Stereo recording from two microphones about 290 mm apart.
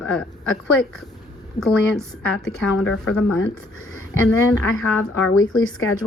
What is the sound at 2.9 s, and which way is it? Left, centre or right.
Speech, left.